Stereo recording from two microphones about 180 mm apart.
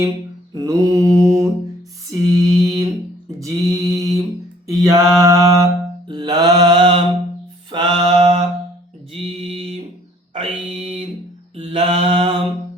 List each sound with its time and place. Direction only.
0.5 s mantra: 20° right (ahead or behind)
2.0 s music: 20° right (ahead or behind)
3.4 s mantra: 20° right (ahead or behind)
10.3 s a sound: 35° right (ahead or behind)
11.5 s mantra: 30° right (ahead or behind)